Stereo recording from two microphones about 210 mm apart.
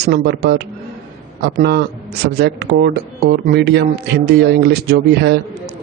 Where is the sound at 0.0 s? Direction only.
50° right (ahead or behind).